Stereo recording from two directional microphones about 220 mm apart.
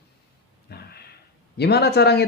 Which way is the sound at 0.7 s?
45° left (ahead or behind).